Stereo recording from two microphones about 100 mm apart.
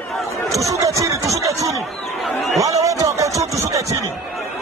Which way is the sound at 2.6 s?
35° right (ahead or behind).